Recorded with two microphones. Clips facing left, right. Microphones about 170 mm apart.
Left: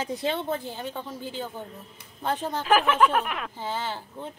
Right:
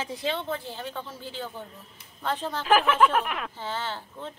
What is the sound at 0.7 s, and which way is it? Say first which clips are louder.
Speech: left 2 dB; 15° left (ahead or behind).